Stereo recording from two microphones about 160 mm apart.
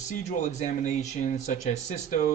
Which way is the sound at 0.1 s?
50° left (ahead or behind).